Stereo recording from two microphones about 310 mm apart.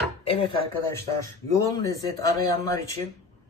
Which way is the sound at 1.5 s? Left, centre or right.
Centre.